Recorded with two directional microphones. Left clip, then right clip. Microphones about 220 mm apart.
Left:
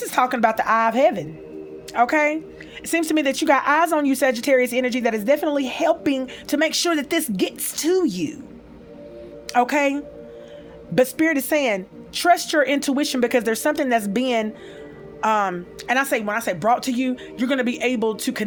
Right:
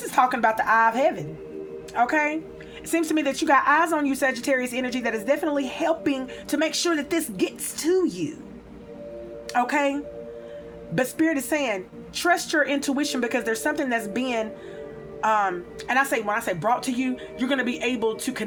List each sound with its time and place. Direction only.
0.0 s speech: 45° left (ahead or behind)
9.5 s speech: 50° left (ahead or behind)